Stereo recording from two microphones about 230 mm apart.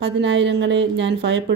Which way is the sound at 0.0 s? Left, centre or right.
Right.